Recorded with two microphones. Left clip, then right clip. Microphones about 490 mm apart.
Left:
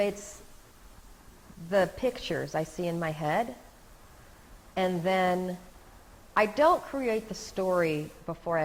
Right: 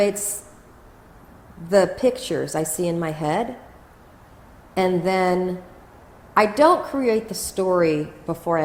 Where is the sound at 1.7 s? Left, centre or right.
Left.